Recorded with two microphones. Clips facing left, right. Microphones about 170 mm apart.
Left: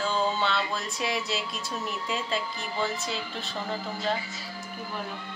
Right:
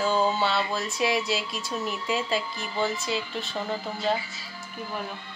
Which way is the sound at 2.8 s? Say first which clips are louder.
Right 4 dB; centre (ahead or behind).